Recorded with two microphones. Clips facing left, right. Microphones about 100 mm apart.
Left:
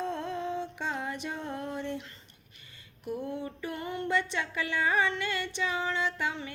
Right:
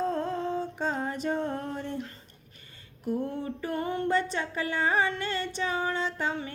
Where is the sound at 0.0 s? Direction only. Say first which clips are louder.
Right 4 dB; 40° right (ahead or behind).